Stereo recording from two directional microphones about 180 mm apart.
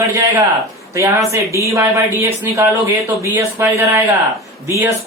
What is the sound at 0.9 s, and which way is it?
A man's voice, 15° right (ahead or behind).